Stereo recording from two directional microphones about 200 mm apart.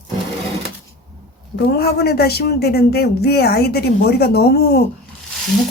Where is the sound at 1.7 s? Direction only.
55° left (ahead or behind).